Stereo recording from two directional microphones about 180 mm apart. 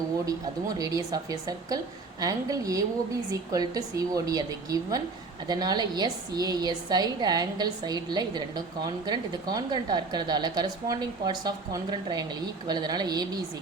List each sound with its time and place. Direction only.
0.8 s a woman's voice: 20° right (ahead or behind)